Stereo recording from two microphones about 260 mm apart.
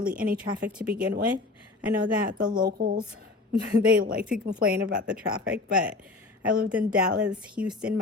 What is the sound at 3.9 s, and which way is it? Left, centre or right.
Speech, right.